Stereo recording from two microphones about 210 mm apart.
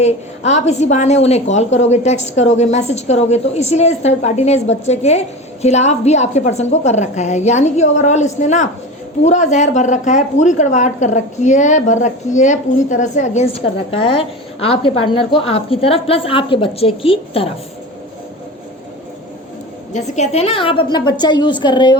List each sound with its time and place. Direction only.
0.0 s speech: 30° left (ahead or behind)
19.9 s a woman's voice: 30° left (ahead or behind)